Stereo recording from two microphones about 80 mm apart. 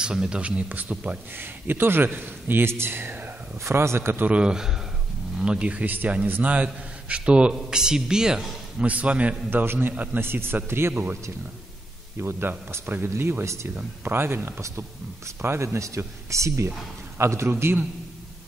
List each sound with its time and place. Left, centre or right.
0.0 s speech: centre; by 4.3 s right
4.3 s a man's voice: centre; by 11.1 s right
12.2 s speech: right